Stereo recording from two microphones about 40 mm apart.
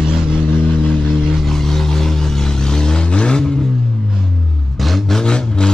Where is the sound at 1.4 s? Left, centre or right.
Centre.